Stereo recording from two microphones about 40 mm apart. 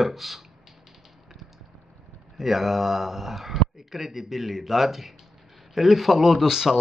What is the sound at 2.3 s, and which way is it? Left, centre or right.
Speech, centre.